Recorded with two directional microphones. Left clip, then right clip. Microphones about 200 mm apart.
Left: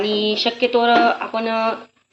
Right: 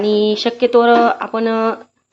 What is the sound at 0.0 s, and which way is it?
A woman's voice, 55° right (ahead or behind).